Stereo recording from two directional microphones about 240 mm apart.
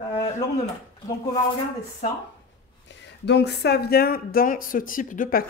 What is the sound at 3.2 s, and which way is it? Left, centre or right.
Speech, left.